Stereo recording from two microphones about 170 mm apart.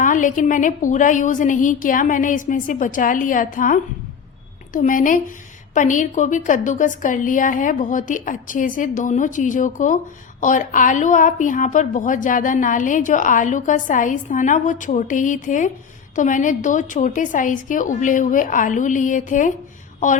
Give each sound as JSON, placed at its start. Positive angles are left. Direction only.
{"t": 0.0, "sound": "a woman's voice", "side_deg": 50}